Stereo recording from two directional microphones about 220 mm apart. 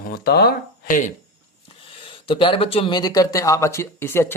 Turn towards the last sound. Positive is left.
turn(degrees=10)  # may be behind; listen again after turning